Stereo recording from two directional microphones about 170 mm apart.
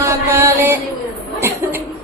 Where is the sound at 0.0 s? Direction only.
15° right (ahead or behind).